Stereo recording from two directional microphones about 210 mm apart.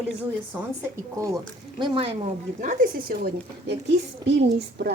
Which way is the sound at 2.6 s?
40° right (ahead or behind).